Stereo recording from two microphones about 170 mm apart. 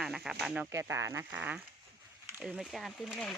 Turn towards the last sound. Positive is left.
turn(degrees=0)  # may be behind; listen again after turning